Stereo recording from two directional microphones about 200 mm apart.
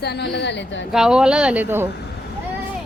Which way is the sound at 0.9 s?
5° right (ahead or behind).